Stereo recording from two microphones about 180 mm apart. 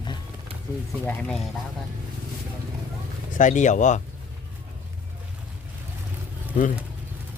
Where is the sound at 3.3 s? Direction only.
45° left (ahead or behind).